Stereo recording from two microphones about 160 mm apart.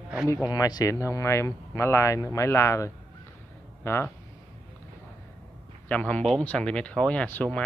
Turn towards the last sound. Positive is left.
turn(degrees=10)  # may be behind; listen again after turning